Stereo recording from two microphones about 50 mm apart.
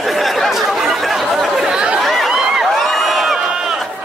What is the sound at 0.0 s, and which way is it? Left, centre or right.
Chatter, centre.